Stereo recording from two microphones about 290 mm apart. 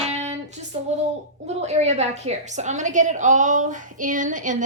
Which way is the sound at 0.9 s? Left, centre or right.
Right.